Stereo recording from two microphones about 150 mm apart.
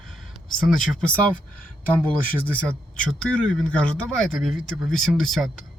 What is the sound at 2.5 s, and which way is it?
Speech, 10° left (ahead or behind).